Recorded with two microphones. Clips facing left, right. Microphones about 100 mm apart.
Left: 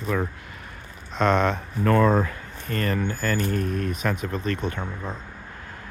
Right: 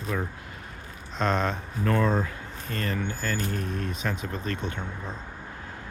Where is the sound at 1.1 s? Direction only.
70° left (ahead or behind).